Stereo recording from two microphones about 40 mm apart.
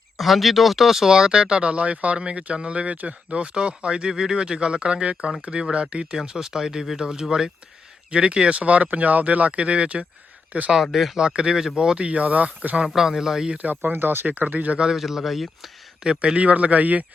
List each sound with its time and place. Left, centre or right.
0.2 s speech: centre; by 6.1 s right
6.2 s speech: centre
8.1 s speech: right
10.5 s speech: right
10.9 s speech: centre
11.2 s speech: right
11.9 s speech: right
12.9 s speech: centre
13.5 s speech: right
13.9 s speech: right
14.3 s speech: right
14.9 s speech: centre
16.0 s speech: right
16.4 s speech: right